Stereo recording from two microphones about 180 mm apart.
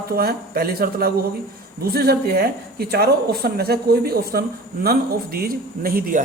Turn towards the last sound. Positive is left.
turn(degrees=-50)  # may be behind; listen again after turning